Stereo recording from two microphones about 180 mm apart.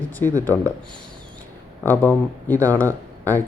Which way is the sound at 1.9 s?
10° left (ahead or behind).